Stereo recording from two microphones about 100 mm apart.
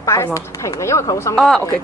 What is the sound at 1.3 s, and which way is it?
Speech, 5° left (ahead or behind).